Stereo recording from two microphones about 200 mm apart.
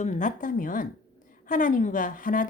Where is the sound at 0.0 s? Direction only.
40° left (ahead or behind).